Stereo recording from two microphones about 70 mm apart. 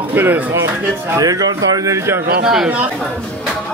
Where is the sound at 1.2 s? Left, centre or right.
Right.